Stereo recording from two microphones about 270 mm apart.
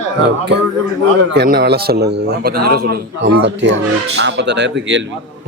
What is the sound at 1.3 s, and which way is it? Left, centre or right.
A man's voice, right.